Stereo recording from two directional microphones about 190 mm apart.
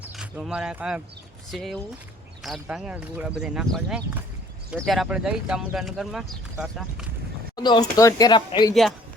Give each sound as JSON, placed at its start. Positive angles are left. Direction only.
{"t": 0.0, "sound": "speech", "side_deg": -5}
{"t": 7.5, "sound": "speech", "side_deg": 20}